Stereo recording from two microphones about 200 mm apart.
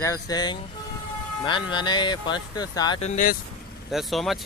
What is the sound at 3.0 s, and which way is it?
Speech, 35° left (ahead or behind).